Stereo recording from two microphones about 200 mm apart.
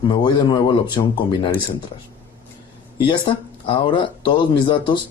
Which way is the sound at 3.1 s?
25° left (ahead or behind).